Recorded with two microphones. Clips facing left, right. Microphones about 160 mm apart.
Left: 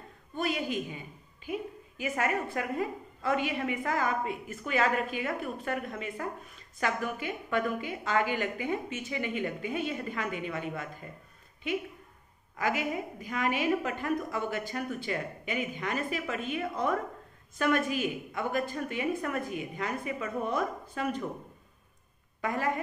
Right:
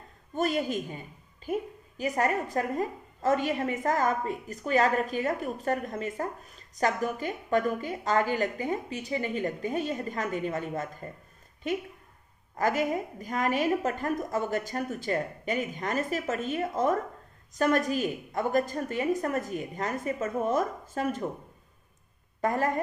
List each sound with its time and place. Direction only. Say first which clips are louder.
0.3 s a woman's voice: right 4 dB; 45° right (ahead or behind)
22.4 s a woman's voice: right 4 dB; 45° right (ahead or behind)